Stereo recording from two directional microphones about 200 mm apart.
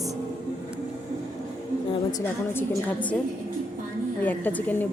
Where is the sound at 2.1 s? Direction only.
10° left (ahead or behind).